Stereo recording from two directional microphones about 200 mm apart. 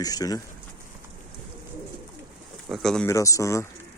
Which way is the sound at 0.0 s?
20° left (ahead or behind).